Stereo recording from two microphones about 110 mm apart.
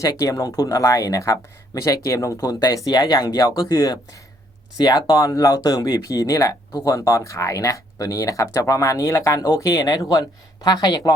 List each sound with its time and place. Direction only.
0.0 s speech: 30° left (ahead or behind)